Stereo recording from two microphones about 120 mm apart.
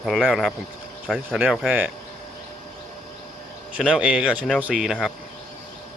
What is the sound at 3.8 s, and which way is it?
Speech, 10° right (ahead or behind).